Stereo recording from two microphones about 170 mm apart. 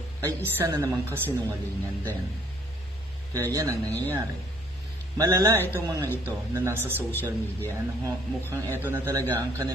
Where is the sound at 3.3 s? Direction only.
20° right (ahead or behind).